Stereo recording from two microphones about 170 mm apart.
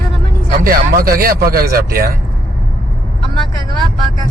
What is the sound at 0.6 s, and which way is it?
Speech, 55° right (ahead or behind).